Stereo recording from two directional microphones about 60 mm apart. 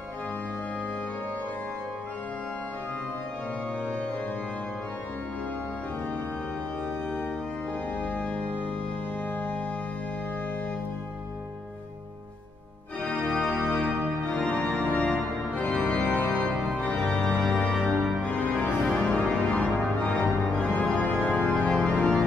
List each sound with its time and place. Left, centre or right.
8.0 s organ: centre
13.0 s organ: centre
13.6 s music: centre
14.5 s organ: centre
17.5 s music: centre
18.2 s organ: centre